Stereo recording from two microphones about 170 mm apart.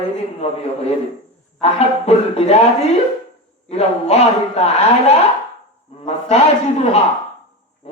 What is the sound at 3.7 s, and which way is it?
A man's voice, 40° left (ahead or behind).